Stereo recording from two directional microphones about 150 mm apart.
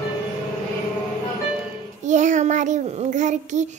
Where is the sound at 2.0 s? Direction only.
55° right (ahead or behind).